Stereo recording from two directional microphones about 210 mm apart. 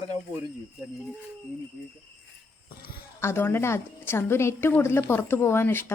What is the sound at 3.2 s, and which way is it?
A woman's voice, 10° left (ahead or behind).